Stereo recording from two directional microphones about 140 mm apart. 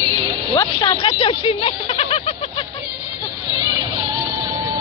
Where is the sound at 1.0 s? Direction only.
40° left (ahead or behind).